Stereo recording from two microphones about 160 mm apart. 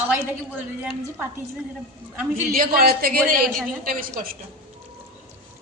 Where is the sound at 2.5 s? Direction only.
65° right (ahead or behind).